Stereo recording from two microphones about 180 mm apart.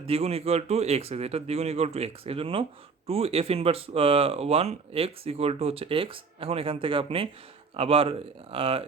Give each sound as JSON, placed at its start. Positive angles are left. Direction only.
{"t": 0.0, "sound": "speech", "side_deg": -35}